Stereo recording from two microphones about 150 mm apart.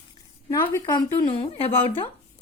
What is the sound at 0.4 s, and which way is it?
A woman's voice, 30° left (ahead or behind).